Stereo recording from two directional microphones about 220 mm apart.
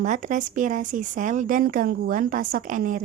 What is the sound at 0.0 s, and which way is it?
Speech, 35° right (ahead or behind).